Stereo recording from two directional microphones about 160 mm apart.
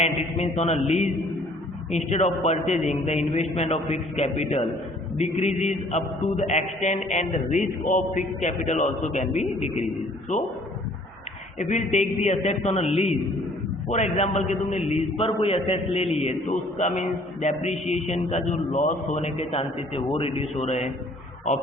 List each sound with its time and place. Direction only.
0.0 s a man's voice: 40° left (ahead or behind)
11.6 s a man's voice: 50° left (ahead or behind)